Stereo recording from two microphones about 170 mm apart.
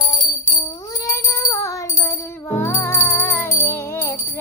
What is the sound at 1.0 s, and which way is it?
Music, 15° left (ahead or behind).